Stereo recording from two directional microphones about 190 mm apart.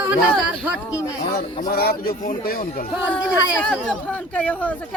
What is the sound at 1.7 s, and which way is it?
Speech, 55° left (ahead or behind).